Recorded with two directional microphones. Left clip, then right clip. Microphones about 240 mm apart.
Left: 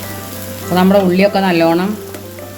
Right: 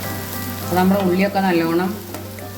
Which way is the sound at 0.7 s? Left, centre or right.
Left.